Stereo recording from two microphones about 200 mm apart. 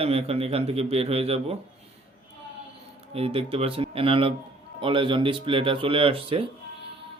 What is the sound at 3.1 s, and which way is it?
Speech, 30° right (ahead or behind).